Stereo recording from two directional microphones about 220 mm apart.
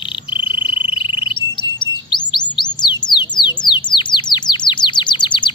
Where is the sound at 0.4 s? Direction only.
25° left (ahead or behind).